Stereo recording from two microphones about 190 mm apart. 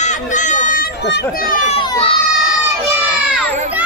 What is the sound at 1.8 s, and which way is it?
Speech, 30° left (ahead or behind).